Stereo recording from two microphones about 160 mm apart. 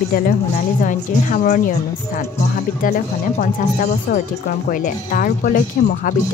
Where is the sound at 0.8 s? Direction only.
50° left (ahead or behind).